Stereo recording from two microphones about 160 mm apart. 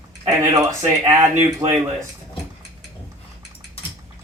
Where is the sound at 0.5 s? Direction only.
20° right (ahead or behind).